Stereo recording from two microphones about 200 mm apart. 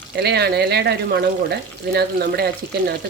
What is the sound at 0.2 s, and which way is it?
Speech, 55° right (ahead or behind).